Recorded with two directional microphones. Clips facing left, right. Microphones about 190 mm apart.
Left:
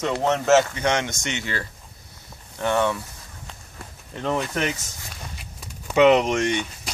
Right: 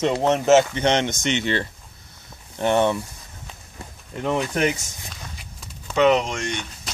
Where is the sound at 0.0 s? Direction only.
20° right (ahead or behind).